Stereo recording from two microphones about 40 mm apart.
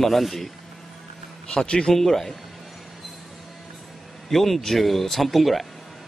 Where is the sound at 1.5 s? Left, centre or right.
Left.